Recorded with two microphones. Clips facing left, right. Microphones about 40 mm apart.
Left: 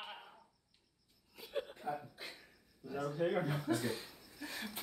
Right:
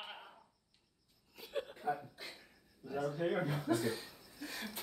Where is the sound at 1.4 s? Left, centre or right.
Centre.